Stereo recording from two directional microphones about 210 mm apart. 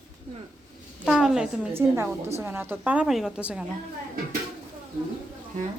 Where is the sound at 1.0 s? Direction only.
5° right (ahead or behind).